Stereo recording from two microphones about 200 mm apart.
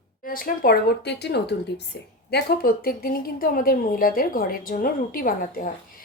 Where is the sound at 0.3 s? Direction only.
45° left (ahead or behind).